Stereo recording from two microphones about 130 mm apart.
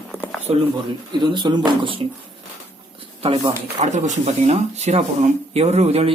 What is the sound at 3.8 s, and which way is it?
Speech, 65° right (ahead or behind).